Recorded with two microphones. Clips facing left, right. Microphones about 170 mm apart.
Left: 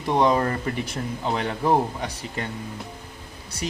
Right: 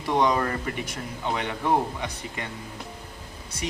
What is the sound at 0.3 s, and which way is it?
A man's voice, 30° left (ahead or behind).